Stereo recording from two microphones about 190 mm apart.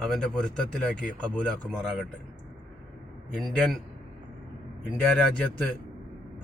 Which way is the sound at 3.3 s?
5° left (ahead or behind).